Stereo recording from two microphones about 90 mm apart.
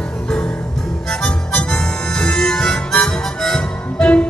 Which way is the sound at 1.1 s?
5° left (ahead or behind).